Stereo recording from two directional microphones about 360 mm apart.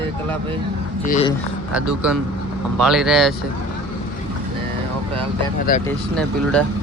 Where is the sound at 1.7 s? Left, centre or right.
Centre.